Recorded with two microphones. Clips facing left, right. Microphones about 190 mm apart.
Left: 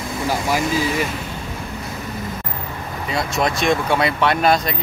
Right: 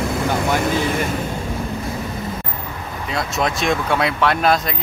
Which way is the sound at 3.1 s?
Centre (ahead or behind).